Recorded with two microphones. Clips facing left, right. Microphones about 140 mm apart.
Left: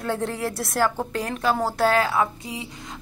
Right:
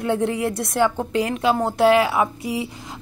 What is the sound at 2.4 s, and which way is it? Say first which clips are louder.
Speech: right 8 dB; 25° left (ahead or behind).